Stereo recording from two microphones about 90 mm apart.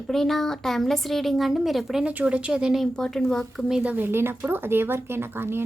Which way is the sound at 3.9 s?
25° right (ahead or behind).